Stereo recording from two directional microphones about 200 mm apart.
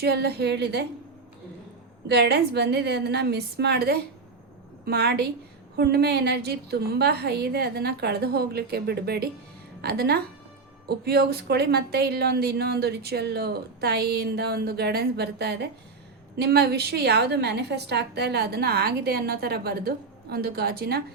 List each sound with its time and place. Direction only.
0.0 s a woman's voice: 55° right (ahead or behind)
2.0 s a woman's voice: 55° right (ahead or behind)